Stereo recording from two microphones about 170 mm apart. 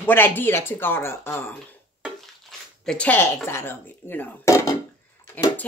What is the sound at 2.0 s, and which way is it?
Speech, 5° left (ahead or behind).